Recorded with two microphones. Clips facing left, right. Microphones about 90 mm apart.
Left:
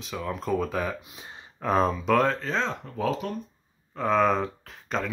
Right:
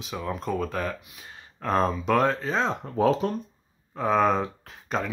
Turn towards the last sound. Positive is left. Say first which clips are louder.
# right 1 dB
turn(degrees=-5)  # may be behind; listen again after turning